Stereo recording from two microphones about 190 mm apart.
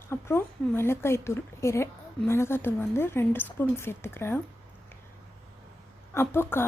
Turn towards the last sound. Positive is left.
turn(degrees=10)  # may be behind; listen again after turning